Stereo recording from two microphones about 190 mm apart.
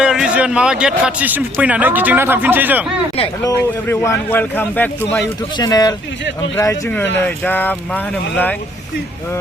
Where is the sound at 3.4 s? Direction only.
15° left (ahead or behind).